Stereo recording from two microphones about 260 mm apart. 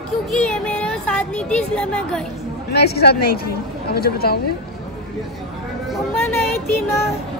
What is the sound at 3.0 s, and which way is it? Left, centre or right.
A woman's voice, left.